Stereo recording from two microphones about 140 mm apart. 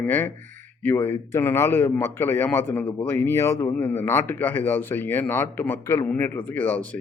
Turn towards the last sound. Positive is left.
turn(degrees=10)  # may be behind; listen again after turning